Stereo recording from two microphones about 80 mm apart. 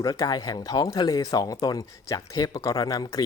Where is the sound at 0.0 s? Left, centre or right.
Left.